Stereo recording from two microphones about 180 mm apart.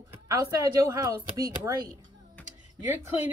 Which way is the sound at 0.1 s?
20° right (ahead or behind).